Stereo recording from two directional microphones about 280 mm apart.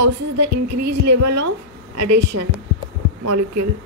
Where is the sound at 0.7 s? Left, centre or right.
Right.